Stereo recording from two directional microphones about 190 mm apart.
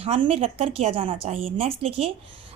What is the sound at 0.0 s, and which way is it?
A woman's voice, 30° right (ahead or behind).